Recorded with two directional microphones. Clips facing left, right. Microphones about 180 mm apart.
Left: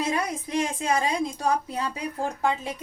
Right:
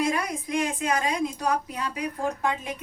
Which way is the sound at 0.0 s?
25° left (ahead or behind).